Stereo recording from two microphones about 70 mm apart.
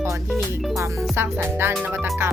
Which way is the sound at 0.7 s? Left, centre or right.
Right.